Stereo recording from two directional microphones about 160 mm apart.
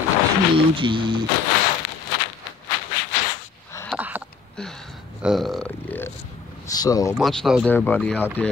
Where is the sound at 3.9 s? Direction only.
10° right (ahead or behind).